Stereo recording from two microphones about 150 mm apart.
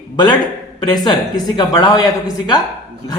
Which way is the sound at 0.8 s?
30° left (ahead or behind).